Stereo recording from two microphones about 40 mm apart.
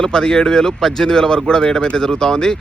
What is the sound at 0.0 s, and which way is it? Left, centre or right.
Speech, centre.